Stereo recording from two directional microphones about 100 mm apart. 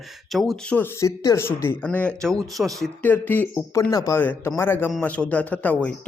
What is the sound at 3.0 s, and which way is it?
Speech, 20° left (ahead or behind).